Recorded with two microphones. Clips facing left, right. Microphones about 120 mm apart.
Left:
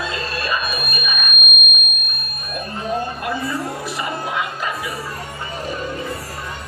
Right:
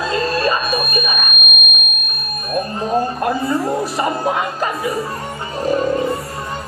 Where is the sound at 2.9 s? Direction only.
40° right (ahead or behind).